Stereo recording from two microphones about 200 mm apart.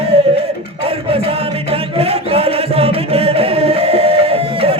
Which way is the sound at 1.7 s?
30° right (ahead or behind).